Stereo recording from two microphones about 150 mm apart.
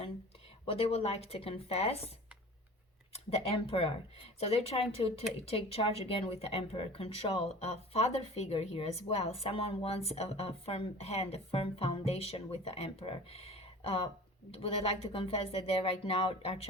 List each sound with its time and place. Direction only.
0.6 s speech: 40° left (ahead or behind)
3.2 s speech: 40° left (ahead or behind)